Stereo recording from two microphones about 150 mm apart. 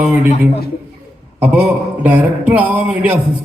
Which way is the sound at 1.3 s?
10° right (ahead or behind).